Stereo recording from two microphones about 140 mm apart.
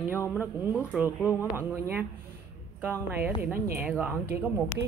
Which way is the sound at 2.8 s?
15° right (ahead or behind).